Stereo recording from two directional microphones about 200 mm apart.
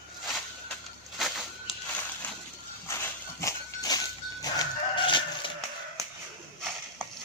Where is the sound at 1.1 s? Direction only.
Centre (ahead or behind).